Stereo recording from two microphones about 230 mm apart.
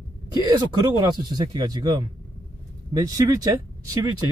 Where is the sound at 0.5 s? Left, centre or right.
Centre.